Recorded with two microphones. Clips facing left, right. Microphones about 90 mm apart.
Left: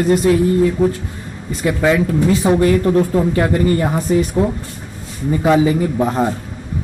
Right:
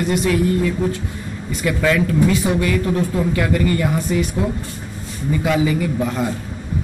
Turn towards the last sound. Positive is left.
turn(degrees=35)  # may be behind; listen again after turning